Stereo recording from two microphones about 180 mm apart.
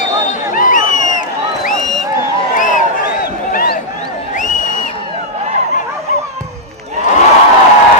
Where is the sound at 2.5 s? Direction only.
45° left (ahead or behind).